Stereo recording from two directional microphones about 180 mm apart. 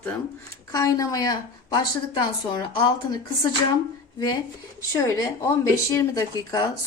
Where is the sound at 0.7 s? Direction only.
20° left (ahead or behind).